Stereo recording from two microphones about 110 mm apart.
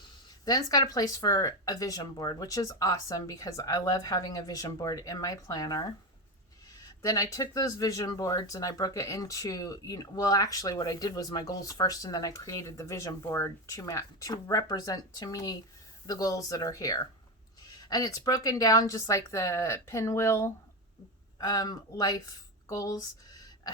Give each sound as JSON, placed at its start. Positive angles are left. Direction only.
{"t": 0.4, "sound": "speech", "side_deg": 35}
{"t": 7.0, "sound": "speech", "side_deg": 30}
{"t": 21.3, "sound": "speech", "side_deg": 35}